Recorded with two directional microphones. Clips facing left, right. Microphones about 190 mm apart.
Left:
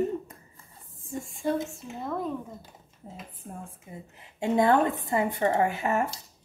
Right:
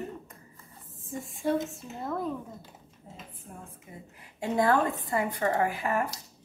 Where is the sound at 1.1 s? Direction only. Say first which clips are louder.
Even; centre (ahead or behind).